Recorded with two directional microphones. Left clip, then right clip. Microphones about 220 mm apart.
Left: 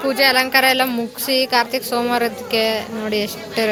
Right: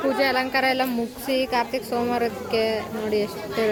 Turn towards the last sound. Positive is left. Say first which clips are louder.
# left 3 dB
turn(degrees=5)  # may be behind; listen again after turning